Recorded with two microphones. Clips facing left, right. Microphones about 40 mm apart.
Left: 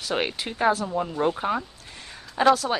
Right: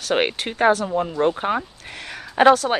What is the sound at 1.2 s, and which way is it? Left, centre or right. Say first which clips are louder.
Speech: right 3 dB; right.